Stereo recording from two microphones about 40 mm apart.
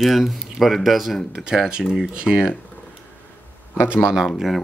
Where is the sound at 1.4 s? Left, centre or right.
Centre.